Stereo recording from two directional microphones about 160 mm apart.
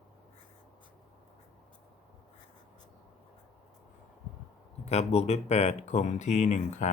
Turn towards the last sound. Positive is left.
turn(degrees=45)  # may be behind; listen again after turning